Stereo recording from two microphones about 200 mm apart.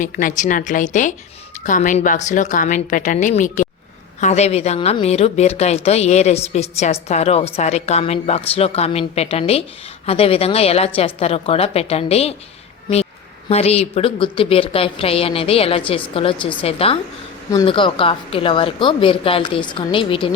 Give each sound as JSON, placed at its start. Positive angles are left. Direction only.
{"t": 0.0, "sound": "a woman's voice", "side_deg": 40}
{"t": 13.5, "sound": "a woman's voice", "side_deg": 30}